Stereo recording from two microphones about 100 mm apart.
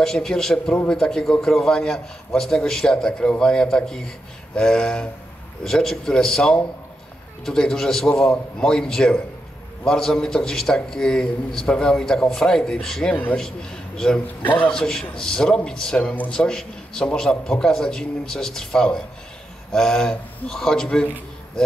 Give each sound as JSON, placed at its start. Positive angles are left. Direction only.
{"t": 0.0, "sound": "a man's voice", "side_deg": 5}
{"t": 13.1, "sound": "a man's voice", "side_deg": 15}
{"t": 13.4, "sound": "a man's voice", "side_deg": 5}
{"t": 14.4, "sound": "a man's voice", "side_deg": 15}
{"t": 14.7, "sound": "a man's voice", "side_deg": 5}